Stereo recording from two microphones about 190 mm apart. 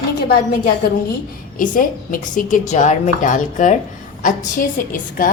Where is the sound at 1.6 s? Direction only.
45° left (ahead or behind).